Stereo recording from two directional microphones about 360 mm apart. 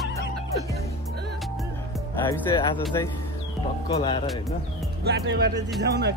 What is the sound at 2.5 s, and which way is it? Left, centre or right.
Speech, centre.